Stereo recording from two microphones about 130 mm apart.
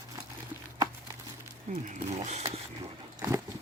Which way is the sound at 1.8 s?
65° right (ahead or behind).